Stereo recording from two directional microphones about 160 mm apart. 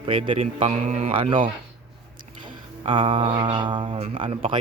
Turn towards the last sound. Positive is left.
turn(degrees=-35)  # may be behind; listen again after turning